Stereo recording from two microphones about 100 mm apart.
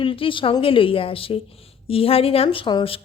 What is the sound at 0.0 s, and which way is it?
A woman's voice, 60° left (ahead or behind).